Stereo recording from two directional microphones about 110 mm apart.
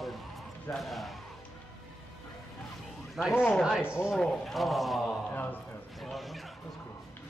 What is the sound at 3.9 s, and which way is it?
Speech, 10° right (ahead or behind).